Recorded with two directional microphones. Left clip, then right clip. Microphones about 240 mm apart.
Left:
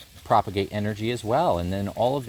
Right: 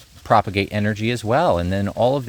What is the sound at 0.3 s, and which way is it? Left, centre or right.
Speech, right.